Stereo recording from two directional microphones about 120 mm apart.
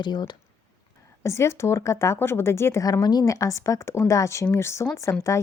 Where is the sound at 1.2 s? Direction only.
25° left (ahead or behind).